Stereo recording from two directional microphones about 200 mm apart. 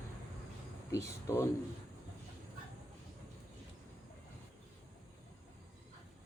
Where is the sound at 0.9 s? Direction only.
15° left (ahead or behind).